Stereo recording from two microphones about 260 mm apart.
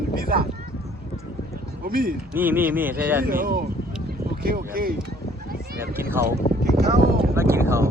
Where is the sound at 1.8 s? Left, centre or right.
Right.